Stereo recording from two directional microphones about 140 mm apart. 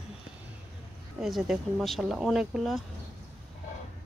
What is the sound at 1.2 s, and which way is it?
Speech, centre (ahead or behind).